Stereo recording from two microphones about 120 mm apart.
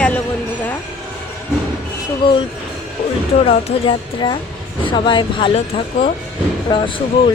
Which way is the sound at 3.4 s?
40° left (ahead or behind).